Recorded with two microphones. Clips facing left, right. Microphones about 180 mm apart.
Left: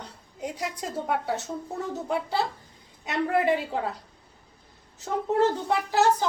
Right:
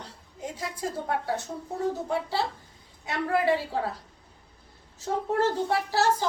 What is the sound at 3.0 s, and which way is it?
Speech, 20° left (ahead or behind).